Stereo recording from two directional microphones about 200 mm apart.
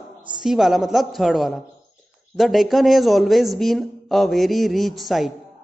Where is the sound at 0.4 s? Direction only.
Centre (ahead or behind).